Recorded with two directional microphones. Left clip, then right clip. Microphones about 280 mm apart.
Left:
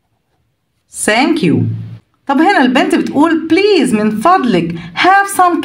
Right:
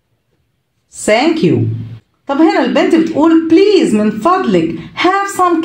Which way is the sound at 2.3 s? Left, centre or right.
Left.